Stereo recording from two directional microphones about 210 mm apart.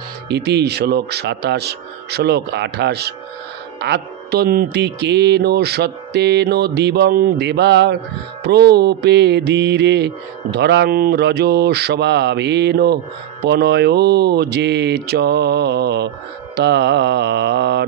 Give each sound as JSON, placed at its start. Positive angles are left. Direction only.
{"t": 0.3, "sound": "mantra", "side_deg": -50}